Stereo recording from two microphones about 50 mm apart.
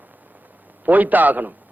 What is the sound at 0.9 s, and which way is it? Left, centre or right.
Speech, right.